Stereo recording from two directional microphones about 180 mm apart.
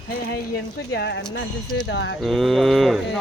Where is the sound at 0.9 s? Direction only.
75° left (ahead or behind).